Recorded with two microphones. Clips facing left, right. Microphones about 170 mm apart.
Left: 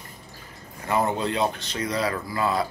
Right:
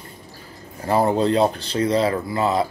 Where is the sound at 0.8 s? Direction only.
35° right (ahead or behind).